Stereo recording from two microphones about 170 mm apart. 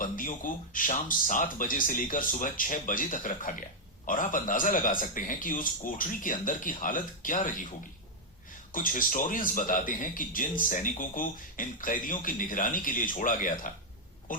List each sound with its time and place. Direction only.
0.0 s speech: 50° left (ahead or behind)
8.7 s speech: 55° left (ahead or behind)